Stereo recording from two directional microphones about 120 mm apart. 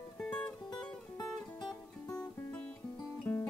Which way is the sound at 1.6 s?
35° left (ahead or behind).